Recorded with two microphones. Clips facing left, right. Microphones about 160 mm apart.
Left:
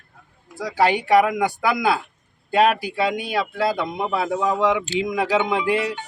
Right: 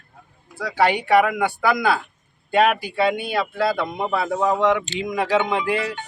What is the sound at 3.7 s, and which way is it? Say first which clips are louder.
A man's voice: even; 10° left (ahead or behind).